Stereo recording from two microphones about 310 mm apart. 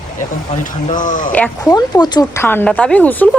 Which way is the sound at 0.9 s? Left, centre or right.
Left.